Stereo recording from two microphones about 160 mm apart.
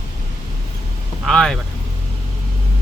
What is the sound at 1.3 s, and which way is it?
Speech, centre (ahead or behind).